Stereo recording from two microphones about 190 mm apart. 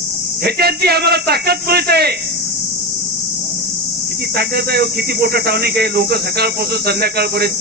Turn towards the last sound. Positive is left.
turn(degrees=-55)  # may be behind; listen again after turning